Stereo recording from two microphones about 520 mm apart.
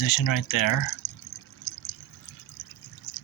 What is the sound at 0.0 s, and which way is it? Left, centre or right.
Speech, left.